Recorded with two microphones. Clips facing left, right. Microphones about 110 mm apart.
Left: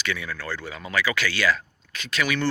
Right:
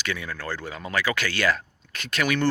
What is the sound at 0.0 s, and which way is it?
Speech, 40° right (ahead or behind).